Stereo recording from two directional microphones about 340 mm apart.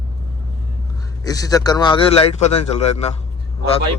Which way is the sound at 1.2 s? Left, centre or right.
Centre.